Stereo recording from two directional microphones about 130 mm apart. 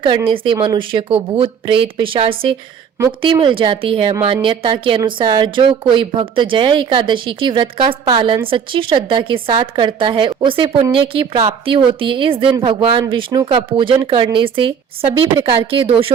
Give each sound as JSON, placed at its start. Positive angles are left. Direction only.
{"t": 0.3, "sound": "speech", "side_deg": -40}